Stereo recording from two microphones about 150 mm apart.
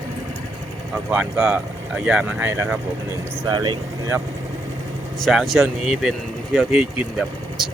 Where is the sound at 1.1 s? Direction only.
5° right (ahead or behind).